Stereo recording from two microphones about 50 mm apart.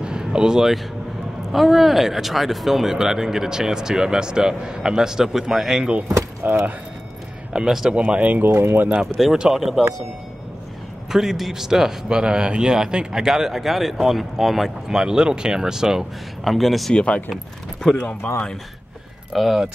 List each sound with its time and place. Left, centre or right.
0.0 s a sound: centre
1.5 s speech: centre
6.4 s speech: right
7.5 s speech: centre
7.9 s speech: right
9.0 s speech: centre
11.1 s speech: centre
16.9 s speech: left
19.3 s speech: centre